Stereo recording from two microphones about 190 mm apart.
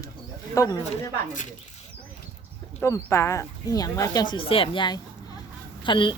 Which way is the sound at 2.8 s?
15° left (ahead or behind).